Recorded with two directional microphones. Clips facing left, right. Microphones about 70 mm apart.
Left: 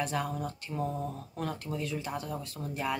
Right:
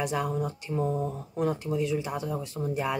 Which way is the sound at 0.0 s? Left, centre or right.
Centre.